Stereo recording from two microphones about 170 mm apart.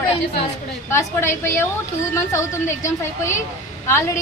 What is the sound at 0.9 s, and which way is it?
A woman's voice, 15° left (ahead or behind).